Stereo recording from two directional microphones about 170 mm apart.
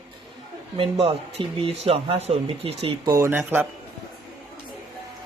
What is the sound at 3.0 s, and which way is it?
Speech, 20° right (ahead or behind).